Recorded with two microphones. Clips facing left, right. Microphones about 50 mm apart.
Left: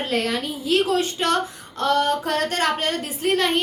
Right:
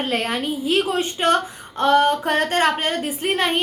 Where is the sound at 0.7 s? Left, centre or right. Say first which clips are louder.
Left 3 dB; right.